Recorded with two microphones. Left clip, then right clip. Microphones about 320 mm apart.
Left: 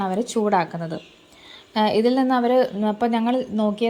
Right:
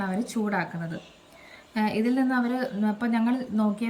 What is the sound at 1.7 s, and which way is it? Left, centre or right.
A woman's voice, centre.